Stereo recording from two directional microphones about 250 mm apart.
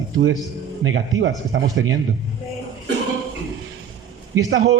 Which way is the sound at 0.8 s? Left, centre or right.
Right.